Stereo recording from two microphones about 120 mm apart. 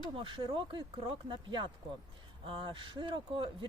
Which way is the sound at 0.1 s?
45° right (ahead or behind).